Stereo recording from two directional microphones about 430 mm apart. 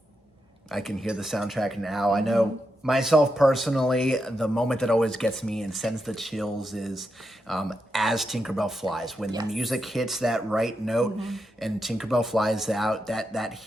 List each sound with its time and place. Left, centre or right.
0.7 s speech: centre